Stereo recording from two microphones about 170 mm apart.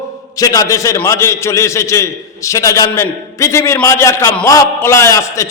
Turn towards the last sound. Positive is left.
turn(degrees=20)  # may be behind; listen again after turning